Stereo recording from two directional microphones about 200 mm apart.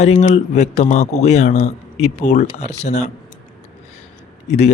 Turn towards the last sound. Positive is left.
turn(degrees=35)  # may be behind; listen again after turning